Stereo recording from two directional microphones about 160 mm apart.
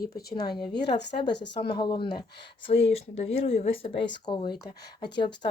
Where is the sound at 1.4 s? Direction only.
80° left.